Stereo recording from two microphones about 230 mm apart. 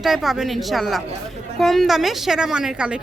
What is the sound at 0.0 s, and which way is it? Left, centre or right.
Speech, centre.